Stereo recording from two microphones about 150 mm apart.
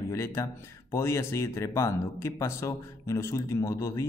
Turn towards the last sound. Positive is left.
turn(degrees=20)  # may be behind; listen again after turning